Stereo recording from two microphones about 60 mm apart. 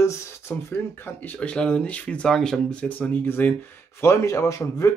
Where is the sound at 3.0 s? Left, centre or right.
Left.